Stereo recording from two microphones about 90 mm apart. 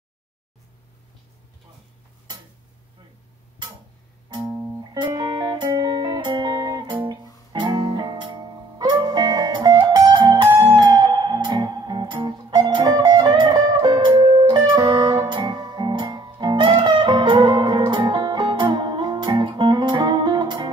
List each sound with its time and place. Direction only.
4.3 s music: 45° right (ahead or behind)